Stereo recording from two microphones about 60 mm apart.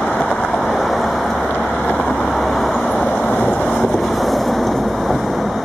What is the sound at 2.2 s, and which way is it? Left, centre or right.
Vehicle, centre.